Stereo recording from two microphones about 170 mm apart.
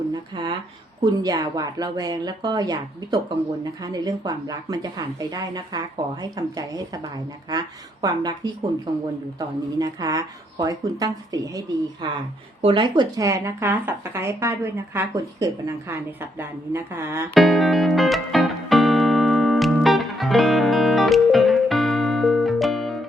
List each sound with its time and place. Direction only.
0.1 s speech: 25° right (ahead or behind)
8.0 s speech: 25° right (ahead or behind)
9.7 s speech: 20° right (ahead or behind)
17.3 s music: centre (ahead or behind)